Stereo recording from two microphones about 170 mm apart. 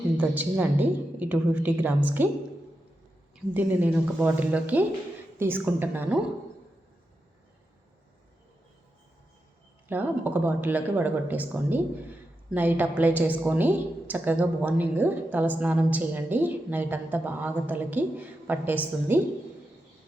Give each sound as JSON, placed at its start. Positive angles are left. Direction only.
{"t": 0.2, "sound": "a woman's voice", "side_deg": -10}
{"t": 3.3, "sound": "a woman's voice", "side_deg": -10}
{"t": 9.9, "sound": "a woman's voice", "side_deg": -10}